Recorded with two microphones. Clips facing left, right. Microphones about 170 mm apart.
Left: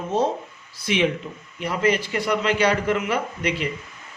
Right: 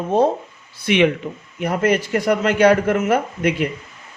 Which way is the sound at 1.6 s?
50° right (ahead or behind).